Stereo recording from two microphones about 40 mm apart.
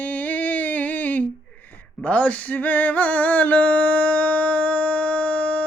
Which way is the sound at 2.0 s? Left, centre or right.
Left.